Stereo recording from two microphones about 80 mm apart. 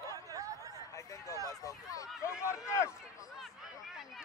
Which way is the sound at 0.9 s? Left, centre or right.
Left.